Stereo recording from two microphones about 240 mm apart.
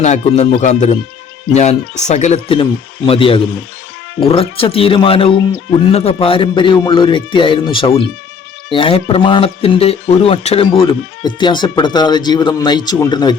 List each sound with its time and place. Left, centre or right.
0.0 s speech: left